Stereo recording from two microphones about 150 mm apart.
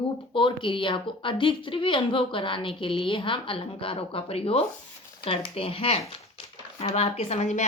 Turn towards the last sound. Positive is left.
turn(degrees=50)  # may be behind; listen again after turning